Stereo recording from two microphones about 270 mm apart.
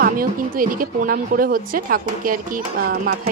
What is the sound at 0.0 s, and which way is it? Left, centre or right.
Speech, right.